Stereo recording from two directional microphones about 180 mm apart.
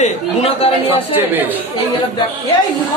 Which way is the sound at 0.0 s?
35° left (ahead or behind).